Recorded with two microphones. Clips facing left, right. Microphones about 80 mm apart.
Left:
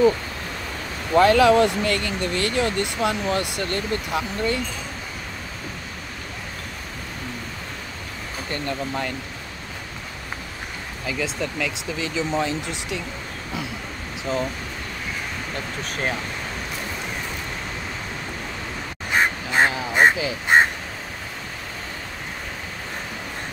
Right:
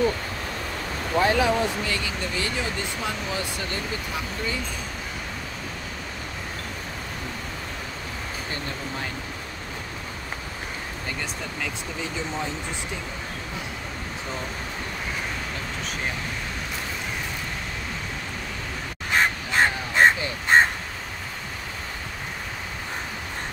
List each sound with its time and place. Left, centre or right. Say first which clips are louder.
1.1 s speech: left 7 dB; left
11.1 s speech: left 6 dB; left
19.1 s duck: left 2 dB; centre